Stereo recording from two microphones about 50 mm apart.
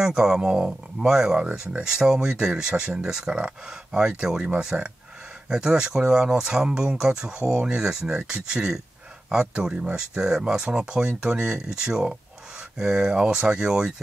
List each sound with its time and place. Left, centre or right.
0.0 s speech: centre
9.9 s speech: centre